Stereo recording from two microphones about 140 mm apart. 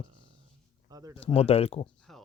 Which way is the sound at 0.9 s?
25° right (ahead or behind).